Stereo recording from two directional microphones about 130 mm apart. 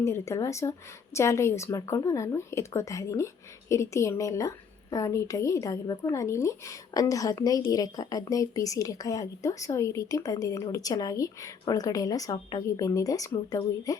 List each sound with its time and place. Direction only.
0.0 s a woman's voice: 20° left (ahead or behind)